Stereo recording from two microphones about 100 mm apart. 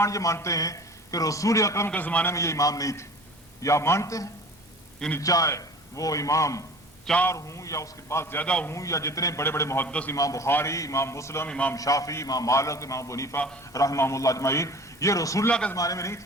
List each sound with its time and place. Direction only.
0.0 s a man's voice: 30° left (ahead or behind)
1.9 s a man's voice: 15° left (ahead or behind)
2.3 s a man's voice: 30° left (ahead or behind)
8.4 s a man's voice: 10° left (ahead or behind)
8.7 s a man's voice: 30° left (ahead or behind); by 10.1 s 15° left (ahead or behind)
10.1 s a man's voice: 35° left (ahead or behind)
11.4 s a man's voice: 10° left (ahead or behind)
11.7 s a man's voice: 35° left (ahead or behind)
15.4 s a man's voice: 10° left (ahead or behind)
15.7 s a man's voice: 35° left (ahead or behind)